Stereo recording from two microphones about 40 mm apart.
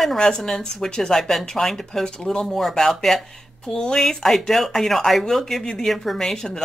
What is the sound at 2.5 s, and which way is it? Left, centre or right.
Speech, centre.